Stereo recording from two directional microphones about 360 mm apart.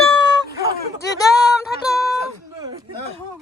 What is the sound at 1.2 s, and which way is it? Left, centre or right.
Music, centre.